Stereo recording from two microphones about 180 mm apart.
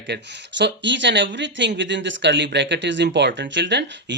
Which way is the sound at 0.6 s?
85° right.